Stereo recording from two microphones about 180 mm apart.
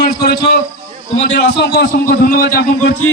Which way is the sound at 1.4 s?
65° left (ahead or behind).